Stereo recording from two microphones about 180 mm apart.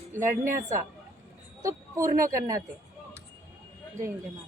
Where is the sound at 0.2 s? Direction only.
15° right (ahead or behind).